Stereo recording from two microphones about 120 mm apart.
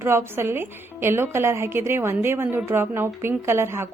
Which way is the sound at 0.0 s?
20° right (ahead or behind).